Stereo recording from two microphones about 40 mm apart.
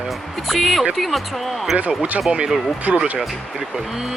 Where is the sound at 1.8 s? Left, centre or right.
Right.